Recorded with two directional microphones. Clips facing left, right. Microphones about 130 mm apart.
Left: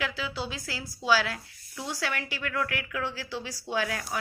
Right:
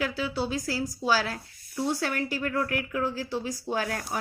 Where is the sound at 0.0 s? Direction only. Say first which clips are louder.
Right 4 dB; 40° right (ahead or behind).